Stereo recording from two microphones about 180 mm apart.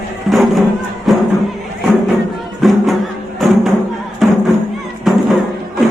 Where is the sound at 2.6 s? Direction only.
Centre (ahead or behind).